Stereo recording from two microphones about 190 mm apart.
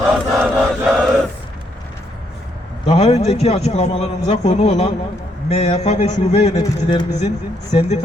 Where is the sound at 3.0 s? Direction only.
35° left (ahead or behind).